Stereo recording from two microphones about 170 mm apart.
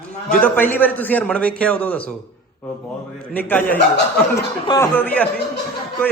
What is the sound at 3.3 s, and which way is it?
A man's voice, 10° left (ahead or behind).